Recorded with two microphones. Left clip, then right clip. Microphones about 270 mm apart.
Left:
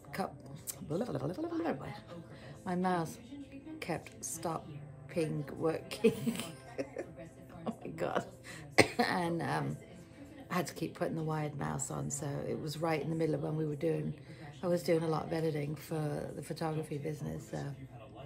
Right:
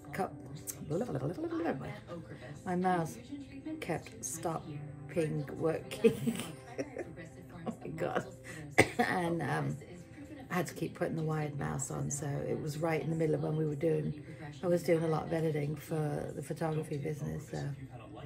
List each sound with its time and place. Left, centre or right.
0.8 s a man's voice: centre
5.6 s speech: centre
7.6 s music: centre
8.7 s speech: centre